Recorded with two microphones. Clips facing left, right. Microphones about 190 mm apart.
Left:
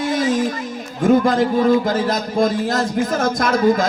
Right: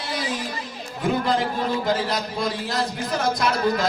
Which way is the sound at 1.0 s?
45° left (ahead or behind).